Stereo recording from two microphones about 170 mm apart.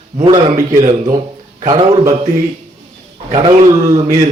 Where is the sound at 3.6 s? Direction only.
40° right (ahead or behind).